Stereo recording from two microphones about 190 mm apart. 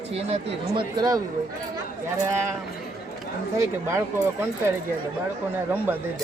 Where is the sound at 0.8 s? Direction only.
20° right (ahead or behind).